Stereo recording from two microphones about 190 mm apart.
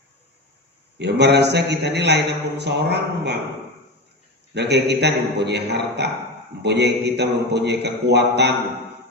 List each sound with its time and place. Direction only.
0.9 s a man's voice: 60° right (ahead or behind)
4.5 s a man's voice: 65° right (ahead or behind)